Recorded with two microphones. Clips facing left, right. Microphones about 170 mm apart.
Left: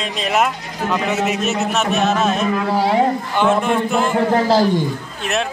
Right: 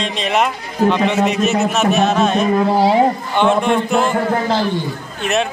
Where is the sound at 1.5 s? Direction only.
Centre (ahead or behind).